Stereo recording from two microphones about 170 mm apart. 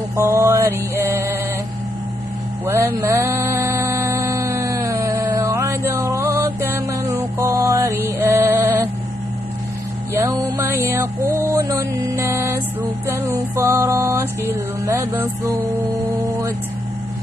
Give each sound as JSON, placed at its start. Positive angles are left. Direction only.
{"t": 0.1, "sound": "mantra", "side_deg": -15}
{"t": 2.6, "sound": "music", "side_deg": -15}
{"t": 10.1, "sound": "music", "side_deg": -20}
{"t": 16.2, "sound": "vehicle", "side_deg": -20}